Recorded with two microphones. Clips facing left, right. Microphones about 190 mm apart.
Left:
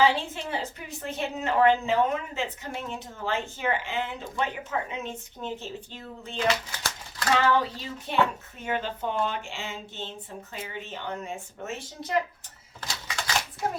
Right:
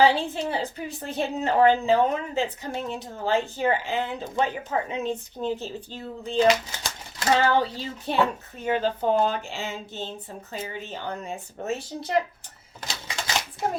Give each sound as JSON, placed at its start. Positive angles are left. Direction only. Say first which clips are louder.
{"t": 0.0, "sound": "a woman's voice", "louder": "right 3 dB", "side_deg": -35}
{"t": 6.5, "sound": "a woman's voice", "louder": "right 5 dB", "side_deg": -20}
{"t": 12.8, "sound": "typewriter", "louder": "right 1 dB", "side_deg": -25}